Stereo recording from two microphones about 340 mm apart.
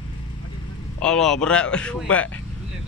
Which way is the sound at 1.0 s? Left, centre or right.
Centre.